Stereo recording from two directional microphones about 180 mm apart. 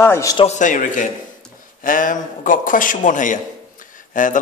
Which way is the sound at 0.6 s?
45° left (ahead or behind).